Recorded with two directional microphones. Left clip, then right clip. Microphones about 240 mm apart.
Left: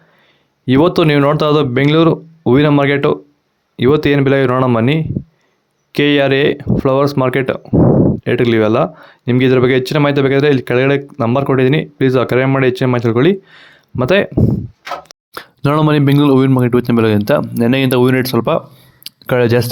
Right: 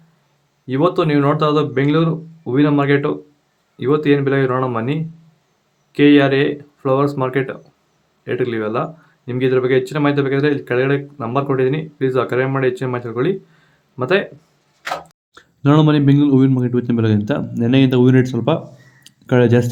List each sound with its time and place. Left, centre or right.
0.7 s speech: left
15.3 s speech: left